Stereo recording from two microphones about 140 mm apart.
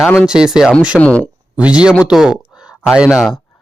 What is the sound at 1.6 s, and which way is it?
Speech, 10° right (ahead or behind).